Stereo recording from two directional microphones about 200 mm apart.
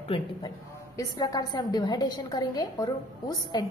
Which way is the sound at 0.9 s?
15° left (ahead or behind).